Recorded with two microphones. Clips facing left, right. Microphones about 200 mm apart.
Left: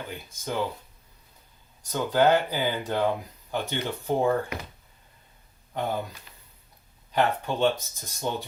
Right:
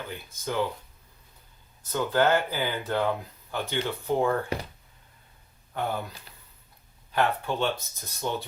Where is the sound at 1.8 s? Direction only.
15° left (ahead or behind).